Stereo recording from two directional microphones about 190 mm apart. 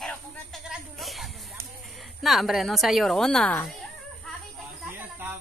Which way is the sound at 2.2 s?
Centre (ahead or behind).